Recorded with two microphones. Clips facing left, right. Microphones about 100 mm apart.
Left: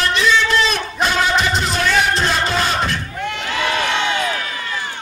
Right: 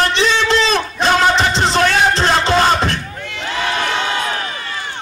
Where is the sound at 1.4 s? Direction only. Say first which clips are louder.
Right 4 dB; 30° right (ahead or behind).